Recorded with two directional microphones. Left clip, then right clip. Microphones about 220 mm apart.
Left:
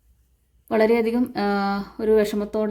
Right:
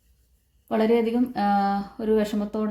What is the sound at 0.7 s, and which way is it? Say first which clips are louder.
Speech: left 3 dB; 40° left (ahead or behind).